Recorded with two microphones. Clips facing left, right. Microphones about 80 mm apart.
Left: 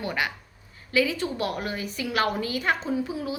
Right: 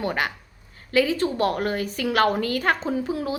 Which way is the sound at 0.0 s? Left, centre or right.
Right.